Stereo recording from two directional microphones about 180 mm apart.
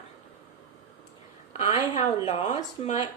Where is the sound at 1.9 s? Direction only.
35° left (ahead or behind).